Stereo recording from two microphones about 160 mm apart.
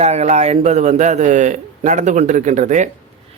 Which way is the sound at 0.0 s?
45° right (ahead or behind).